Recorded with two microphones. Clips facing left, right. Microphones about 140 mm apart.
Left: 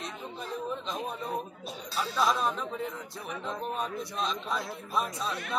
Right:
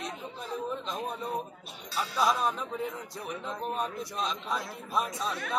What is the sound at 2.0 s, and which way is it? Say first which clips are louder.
Music: even; 5° right (ahead or behind).